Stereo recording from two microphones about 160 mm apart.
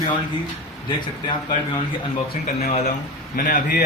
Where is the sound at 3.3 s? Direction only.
55° left (ahead or behind).